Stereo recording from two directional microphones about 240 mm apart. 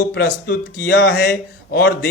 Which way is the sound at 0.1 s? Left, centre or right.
Left.